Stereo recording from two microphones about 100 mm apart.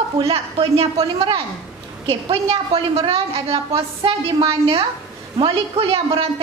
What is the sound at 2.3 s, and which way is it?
A woman's voice, 75° right (ahead or behind).